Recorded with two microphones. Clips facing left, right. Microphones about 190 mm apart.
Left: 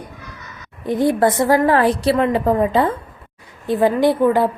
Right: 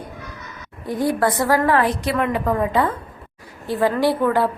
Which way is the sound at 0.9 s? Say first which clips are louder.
Left 4 dB; 20° left (ahead or behind).